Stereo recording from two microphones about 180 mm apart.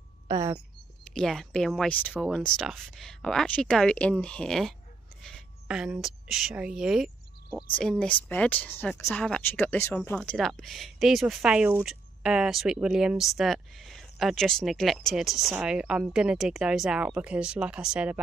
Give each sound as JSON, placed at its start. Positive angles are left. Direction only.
{"t": 0.3, "sound": "a sound", "side_deg": -20}
{"t": 1.1, "sound": "speech", "side_deg": 0}
{"t": 8.0, "sound": "speech", "side_deg": 10}